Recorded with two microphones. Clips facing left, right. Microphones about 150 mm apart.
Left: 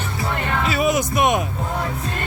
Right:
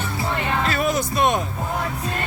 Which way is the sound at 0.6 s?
5° left (ahead or behind).